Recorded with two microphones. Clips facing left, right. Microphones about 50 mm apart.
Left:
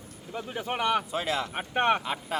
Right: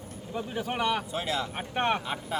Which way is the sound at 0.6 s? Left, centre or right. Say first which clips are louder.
Left 2 dB; left.